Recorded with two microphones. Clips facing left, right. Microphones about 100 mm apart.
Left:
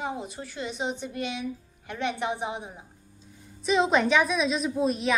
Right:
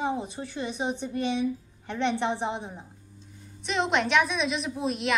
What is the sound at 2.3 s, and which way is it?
A woman's voice, 10° left (ahead or behind).